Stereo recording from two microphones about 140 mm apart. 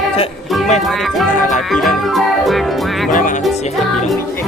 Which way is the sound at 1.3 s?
70° left (ahead or behind).